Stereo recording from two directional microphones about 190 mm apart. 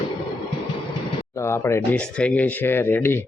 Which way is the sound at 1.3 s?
15° left (ahead or behind).